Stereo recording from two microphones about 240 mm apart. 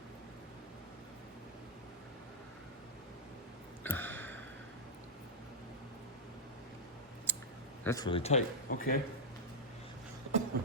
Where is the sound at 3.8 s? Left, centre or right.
Centre.